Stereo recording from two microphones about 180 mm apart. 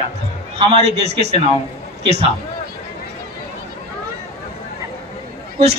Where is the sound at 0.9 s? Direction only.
70° right (ahead or behind).